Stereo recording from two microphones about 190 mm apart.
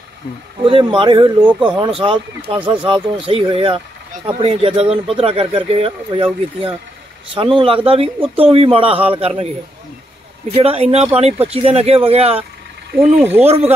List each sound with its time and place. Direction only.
0.7 s a man's voice: 25° right (ahead or behind)
10.5 s speech: 30° right (ahead or behind)
12.9 s speech: 10° right (ahead or behind)